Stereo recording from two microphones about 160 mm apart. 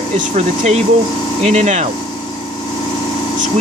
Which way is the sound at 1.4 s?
45° right (ahead or behind).